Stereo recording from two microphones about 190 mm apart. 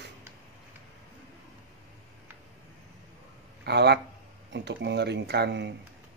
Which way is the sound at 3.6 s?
60° right (ahead or behind).